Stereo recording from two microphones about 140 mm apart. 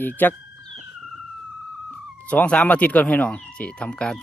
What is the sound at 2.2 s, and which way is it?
Speech, 10° left (ahead or behind).